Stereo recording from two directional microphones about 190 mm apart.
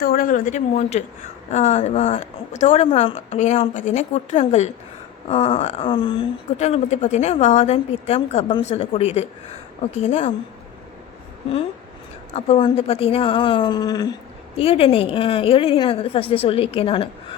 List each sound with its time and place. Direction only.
0.0 s speech: 50° left (ahead or behind)
12.5 s a woman's voice: 25° left (ahead or behind)
14.5 s a woman's voice: 30° left (ahead or behind)